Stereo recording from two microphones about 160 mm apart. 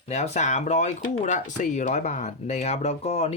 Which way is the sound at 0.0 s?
45° left (ahead or behind).